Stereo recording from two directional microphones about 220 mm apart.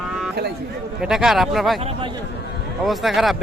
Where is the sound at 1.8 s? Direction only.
25° right (ahead or behind).